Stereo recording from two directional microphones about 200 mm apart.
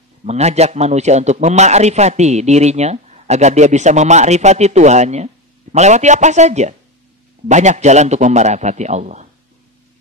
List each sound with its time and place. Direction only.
0.2 s a man's voice: 35° right (ahead or behind)